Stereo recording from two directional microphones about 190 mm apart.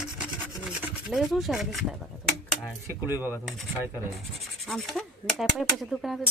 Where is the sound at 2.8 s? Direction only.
10° right (ahead or behind).